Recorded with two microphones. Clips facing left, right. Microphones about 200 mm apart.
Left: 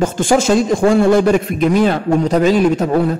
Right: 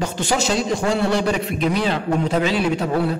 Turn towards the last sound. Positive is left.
turn(degrees=45)  # may be behind; listen again after turning